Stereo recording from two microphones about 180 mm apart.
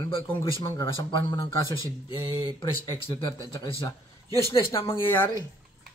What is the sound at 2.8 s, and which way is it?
Speech, 25° left (ahead or behind).